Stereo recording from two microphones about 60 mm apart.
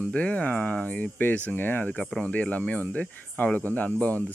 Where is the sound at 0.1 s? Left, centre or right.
Left.